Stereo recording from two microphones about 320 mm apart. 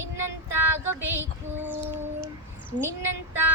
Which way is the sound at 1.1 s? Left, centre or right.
Centre.